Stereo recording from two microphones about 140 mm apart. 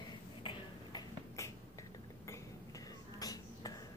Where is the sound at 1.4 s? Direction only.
20° left (ahead or behind).